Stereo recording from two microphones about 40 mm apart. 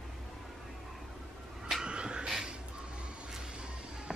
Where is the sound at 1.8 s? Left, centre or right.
Right.